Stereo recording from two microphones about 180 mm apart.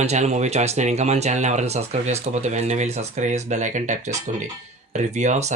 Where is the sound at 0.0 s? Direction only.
40° right (ahead or behind).